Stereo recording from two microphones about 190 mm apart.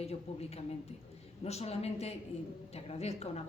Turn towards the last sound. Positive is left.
turn(degrees=35)  # may be behind; listen again after turning